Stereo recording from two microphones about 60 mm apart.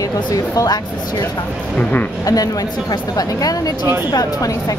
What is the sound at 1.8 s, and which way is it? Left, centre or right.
Speech, left.